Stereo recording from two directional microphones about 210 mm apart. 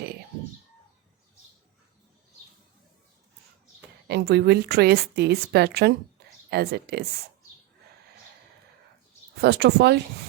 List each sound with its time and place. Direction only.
4.1 s a woman's voice: 50° right (ahead or behind)
9.4 s a woman's voice: 50° right (ahead or behind)